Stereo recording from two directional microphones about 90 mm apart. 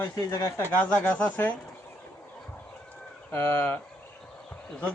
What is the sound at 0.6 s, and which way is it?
Speech, 15° left (ahead or behind).